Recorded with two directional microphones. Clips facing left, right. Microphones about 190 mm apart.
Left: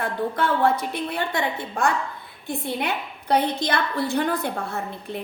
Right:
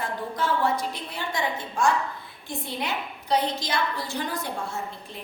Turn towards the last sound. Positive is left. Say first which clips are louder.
# left 7 dB
turn(degrees=60)  # may be behind; listen again after turning